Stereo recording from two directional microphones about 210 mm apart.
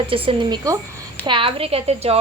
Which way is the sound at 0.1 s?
25° right (ahead or behind).